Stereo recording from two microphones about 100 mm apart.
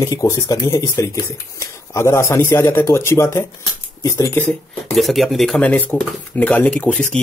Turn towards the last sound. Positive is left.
turn(degrees=10)  # may be behind; listen again after turning